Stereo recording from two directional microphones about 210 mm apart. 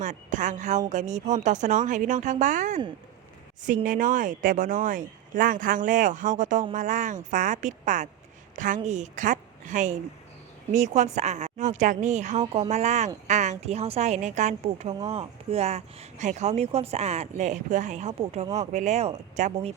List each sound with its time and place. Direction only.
0.0 s speech: 35° right (ahead or behind)
3.8 s speech: 40° right (ahead or behind)